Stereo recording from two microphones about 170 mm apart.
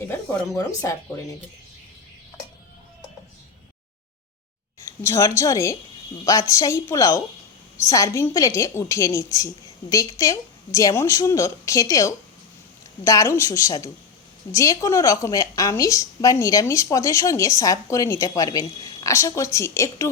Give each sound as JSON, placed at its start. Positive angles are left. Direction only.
{"t": 0.8, "sound": "a woman's voice", "side_deg": 20}
{"t": 5.0, "sound": "a woman's voice", "side_deg": 15}